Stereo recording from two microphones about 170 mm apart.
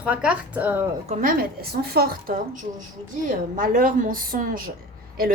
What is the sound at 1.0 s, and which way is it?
A woman's voice, 50° right (ahead or behind).